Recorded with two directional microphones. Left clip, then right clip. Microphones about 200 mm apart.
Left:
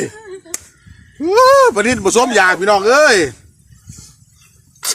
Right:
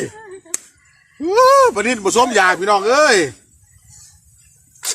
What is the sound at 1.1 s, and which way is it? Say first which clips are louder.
Speech: left 2 dB; 20° left (ahead or behind).